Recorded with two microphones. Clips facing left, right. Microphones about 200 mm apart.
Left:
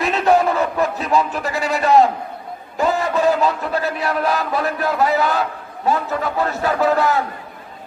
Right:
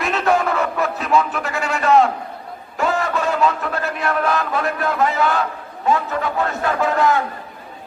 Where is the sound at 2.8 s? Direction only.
35° left (ahead or behind).